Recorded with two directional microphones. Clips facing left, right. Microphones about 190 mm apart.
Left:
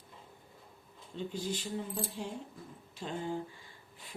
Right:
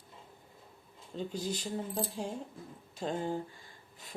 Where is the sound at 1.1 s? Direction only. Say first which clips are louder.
Right 1 dB; 40° right (ahead or behind).